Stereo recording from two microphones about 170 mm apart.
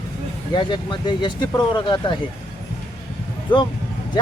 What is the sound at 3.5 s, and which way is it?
Speech, 30° left (ahead or behind).